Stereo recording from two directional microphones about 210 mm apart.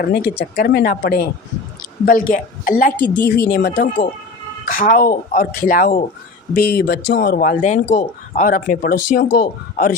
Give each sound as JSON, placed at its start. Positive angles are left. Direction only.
{"t": 0.0, "sound": "speech", "side_deg": 50}